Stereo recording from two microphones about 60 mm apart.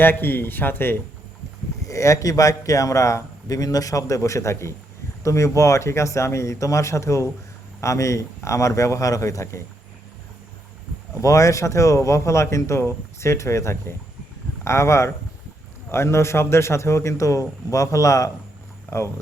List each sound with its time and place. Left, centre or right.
0.0 s speech: left
1.8 s speech: left
11.1 s a man's voice: left
18.9 s speech: left